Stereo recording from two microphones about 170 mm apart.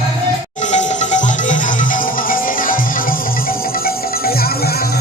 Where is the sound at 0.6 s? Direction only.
45° left (ahead or behind).